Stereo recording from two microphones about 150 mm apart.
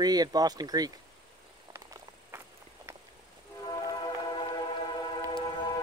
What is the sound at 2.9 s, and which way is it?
Vehicle, 15° right (ahead or behind).